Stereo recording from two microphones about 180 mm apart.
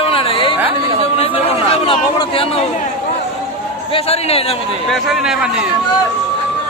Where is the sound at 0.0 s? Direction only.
30° left (ahead or behind).